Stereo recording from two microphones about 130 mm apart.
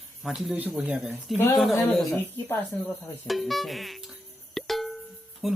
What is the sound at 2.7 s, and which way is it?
Stir, 10° left (ahead or behind).